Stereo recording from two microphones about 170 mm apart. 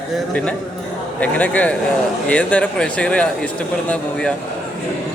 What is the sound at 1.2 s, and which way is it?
A man's voice, 10° left (ahead or behind).